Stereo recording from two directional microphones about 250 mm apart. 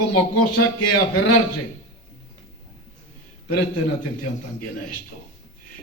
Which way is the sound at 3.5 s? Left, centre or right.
Left.